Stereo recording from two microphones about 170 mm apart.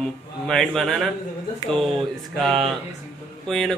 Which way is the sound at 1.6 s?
25° left (ahead or behind).